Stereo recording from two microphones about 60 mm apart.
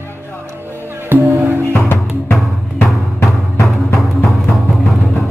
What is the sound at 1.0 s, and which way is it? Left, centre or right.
Music, right.